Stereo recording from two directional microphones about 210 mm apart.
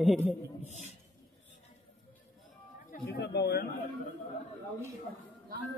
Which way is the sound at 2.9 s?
50° left (ahead or behind).